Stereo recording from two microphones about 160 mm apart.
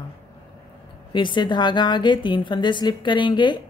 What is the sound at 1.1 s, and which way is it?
A woman's voice, 30° left (ahead or behind).